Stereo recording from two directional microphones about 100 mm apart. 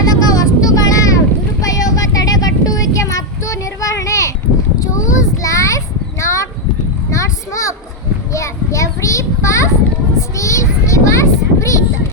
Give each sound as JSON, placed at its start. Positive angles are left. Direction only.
{"t": 0.0, "sound": "vehicle", "side_deg": 40}
{"t": 1.6, "sound": "a sound", "side_deg": 35}
{"t": 10.2, "sound": "child singing", "side_deg": 30}